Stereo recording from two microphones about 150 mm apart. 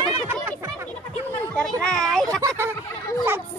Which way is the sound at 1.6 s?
5° left (ahead or behind).